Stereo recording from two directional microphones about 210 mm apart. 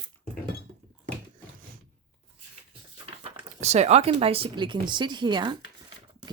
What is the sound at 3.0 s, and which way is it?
Speech, 25° right (ahead or behind).